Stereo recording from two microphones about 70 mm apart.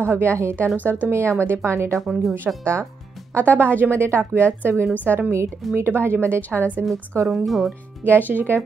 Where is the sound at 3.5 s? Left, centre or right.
Right.